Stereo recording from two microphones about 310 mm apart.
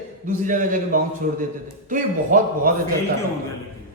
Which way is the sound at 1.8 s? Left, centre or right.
Right.